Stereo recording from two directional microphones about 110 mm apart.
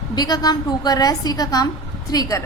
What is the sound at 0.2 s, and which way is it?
A woman's voice, 35° left (ahead or behind).